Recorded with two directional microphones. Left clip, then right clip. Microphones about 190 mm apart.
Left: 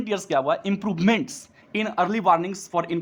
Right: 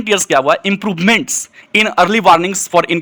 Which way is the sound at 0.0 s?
15° right (ahead or behind).